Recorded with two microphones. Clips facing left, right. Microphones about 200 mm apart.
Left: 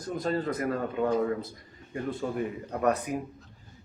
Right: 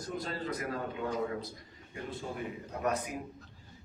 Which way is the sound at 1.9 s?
50° left (ahead or behind).